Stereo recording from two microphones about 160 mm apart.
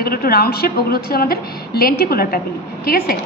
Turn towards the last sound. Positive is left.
turn(degrees=70)  # may be behind; listen again after turning